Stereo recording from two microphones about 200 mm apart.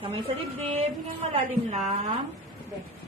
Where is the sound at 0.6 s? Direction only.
35° right (ahead or behind).